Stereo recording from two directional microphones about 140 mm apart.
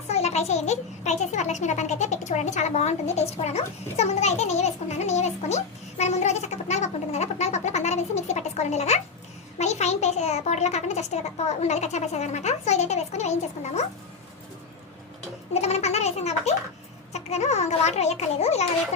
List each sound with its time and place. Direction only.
0.1 s a child's voice: 50° left (ahead or behind)
15.5 s a sound: 50° left (ahead or behind)
17.1 s a child's voice: 55° left (ahead or behind)